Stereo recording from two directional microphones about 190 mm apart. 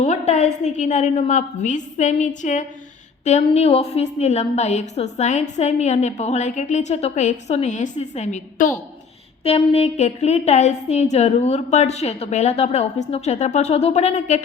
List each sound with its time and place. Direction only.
0.0 s a woman's voice: 35° left (ahead or behind)